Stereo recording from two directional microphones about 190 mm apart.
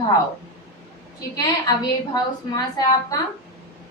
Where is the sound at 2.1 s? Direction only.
20° left (ahead or behind).